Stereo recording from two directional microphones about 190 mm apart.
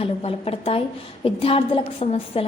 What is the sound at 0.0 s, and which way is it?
A woman's voice, 30° left (ahead or behind).